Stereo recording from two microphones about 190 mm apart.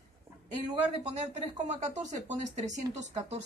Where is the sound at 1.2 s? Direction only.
35° right (ahead or behind).